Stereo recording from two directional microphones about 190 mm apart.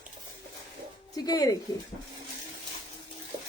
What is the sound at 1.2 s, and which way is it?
Speech, 20° left (ahead or behind).